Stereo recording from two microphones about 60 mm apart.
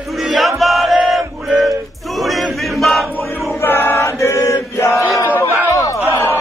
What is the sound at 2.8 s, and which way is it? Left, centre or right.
Music, centre.